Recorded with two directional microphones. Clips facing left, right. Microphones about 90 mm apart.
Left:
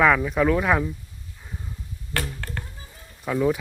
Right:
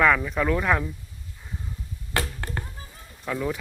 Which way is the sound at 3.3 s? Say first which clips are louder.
Left 6 dB; 10° left (ahead or behind).